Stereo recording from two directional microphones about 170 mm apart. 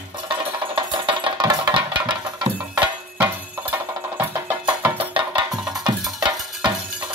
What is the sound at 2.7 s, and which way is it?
Music, 10° right (ahead or behind).